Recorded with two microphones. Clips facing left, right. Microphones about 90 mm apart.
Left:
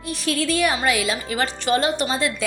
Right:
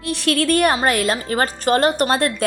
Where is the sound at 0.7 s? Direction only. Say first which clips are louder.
Right 3 dB; 45° right (ahead or behind).